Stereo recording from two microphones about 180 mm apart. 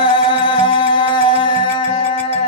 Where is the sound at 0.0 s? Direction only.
25° left (ahead or behind).